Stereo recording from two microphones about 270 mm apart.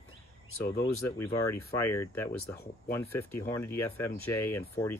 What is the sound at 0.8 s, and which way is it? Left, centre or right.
Speech, centre.